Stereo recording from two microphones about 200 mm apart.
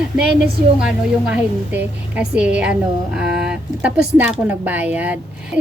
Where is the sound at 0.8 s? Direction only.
5° right (ahead or behind).